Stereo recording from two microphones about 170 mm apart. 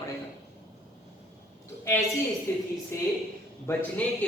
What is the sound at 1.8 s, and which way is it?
A woman's voice, 15° left (ahead or behind).